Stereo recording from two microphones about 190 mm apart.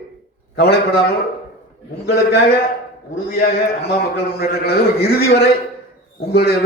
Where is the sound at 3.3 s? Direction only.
55° left (ahead or behind).